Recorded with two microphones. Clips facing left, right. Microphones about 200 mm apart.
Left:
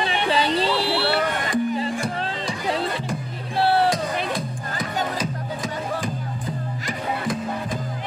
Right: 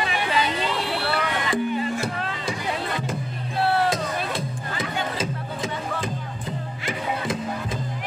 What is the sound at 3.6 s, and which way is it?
Music, 30° left (ahead or behind).